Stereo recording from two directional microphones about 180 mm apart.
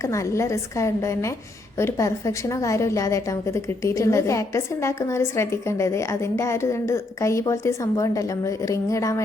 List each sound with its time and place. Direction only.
0.0 s a woman's voice: 15° left (ahead or behind)